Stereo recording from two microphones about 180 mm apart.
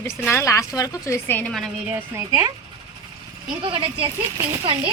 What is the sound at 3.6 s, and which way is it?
Speech, 25° right (ahead or behind).